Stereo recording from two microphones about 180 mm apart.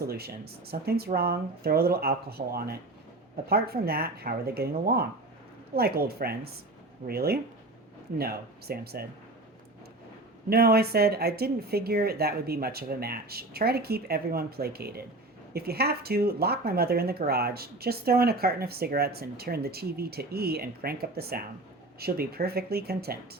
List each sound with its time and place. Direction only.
0.1 s speech: 60° right (ahead or behind)
10.5 s speech: 60° right (ahead or behind)